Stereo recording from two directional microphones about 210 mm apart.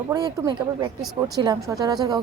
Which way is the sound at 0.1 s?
20° right (ahead or behind).